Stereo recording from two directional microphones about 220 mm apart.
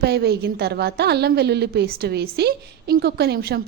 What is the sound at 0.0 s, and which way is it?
A woman's voice, 45° right (ahead or behind).